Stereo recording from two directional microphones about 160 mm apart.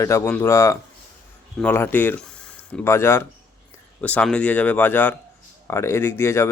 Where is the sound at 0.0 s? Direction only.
20° left (ahead or behind).